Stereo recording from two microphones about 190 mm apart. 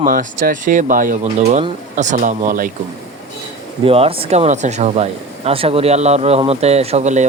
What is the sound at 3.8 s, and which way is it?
Speech, 30° right (ahead or behind).